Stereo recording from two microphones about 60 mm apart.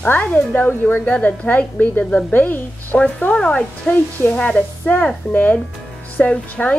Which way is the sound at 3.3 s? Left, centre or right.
Centre.